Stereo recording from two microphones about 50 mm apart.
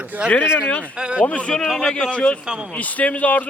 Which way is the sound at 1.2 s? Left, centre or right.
Centre.